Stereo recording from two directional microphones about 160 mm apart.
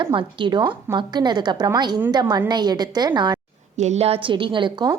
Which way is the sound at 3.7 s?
45° right (ahead or behind).